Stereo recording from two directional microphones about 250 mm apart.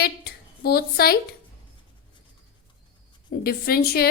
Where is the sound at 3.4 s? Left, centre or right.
Left.